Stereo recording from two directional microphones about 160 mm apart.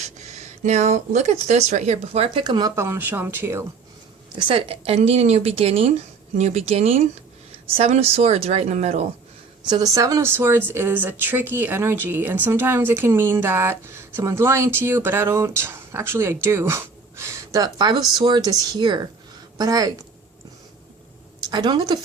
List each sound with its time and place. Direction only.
0.6 s speech: 45° right (ahead or behind); by 3.6 s 15° right (ahead or behind)
4.4 s speech: 35° right (ahead or behind)
9.6 s speech: 25° right (ahead or behind)
21.5 s speech: 25° right (ahead or behind)